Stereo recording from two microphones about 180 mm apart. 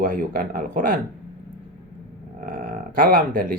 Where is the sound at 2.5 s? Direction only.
45° right (ahead or behind).